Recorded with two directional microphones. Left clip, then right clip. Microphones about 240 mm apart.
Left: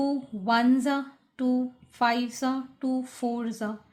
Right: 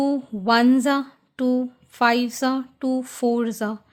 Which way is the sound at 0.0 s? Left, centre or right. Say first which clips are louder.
Right 6 dB; right.